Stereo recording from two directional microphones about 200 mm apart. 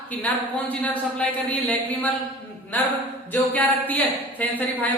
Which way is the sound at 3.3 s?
10° left (ahead or behind).